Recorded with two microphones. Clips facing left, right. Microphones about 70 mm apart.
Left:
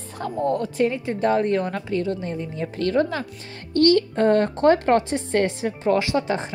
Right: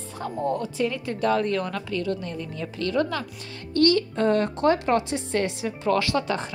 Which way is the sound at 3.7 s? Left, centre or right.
Left.